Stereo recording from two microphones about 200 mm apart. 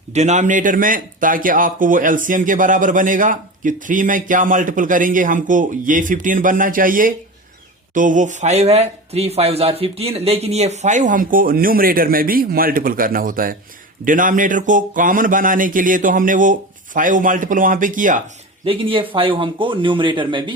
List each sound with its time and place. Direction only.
0.1 s a man's voice: 35° right (ahead or behind)
18.6 s speech: 25° right (ahead or behind)